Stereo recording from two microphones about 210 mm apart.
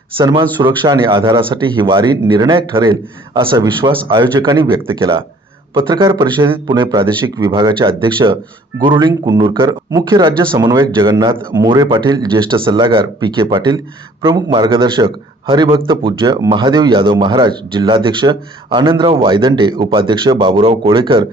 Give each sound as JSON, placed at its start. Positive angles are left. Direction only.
{"t": 0.2, "sound": "speech", "side_deg": -25}